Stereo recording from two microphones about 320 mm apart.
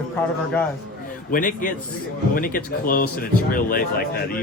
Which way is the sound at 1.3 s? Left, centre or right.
Left.